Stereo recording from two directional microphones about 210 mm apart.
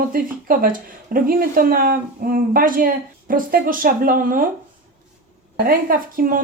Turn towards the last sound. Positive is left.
turn(degrees=-40)  # may be behind; listen again after turning